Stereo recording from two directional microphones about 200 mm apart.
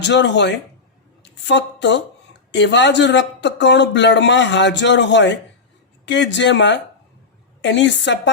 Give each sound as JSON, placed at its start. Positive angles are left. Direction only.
{"t": 0.0, "sound": "speech", "side_deg": 60}
{"t": 1.2, "sound": "a sound", "side_deg": 60}
{"t": 2.5, "sound": "speech", "side_deg": 60}